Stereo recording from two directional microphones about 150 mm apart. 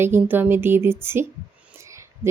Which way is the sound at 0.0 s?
15° right (ahead or behind).